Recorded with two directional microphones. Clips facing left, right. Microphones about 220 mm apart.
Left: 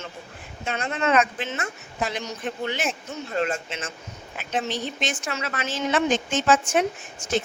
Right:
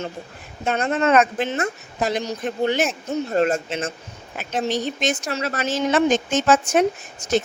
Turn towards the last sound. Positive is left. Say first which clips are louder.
# right 4 dB
turn(degrees=-40)  # may be behind; listen again after turning